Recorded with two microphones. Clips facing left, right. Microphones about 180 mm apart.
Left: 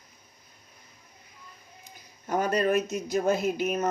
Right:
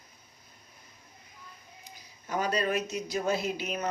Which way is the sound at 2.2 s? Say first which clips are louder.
Left 4 dB; 50° left (ahead or behind).